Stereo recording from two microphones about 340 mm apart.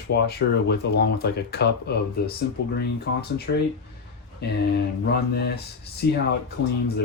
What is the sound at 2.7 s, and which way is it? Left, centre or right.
Speech, left.